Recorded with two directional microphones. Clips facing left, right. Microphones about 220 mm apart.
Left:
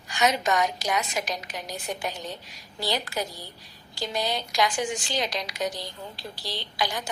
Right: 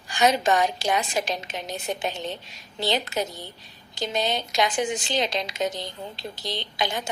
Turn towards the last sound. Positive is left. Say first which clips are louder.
# right 2 dB
turn(degrees=-25)  # may be behind; listen again after turning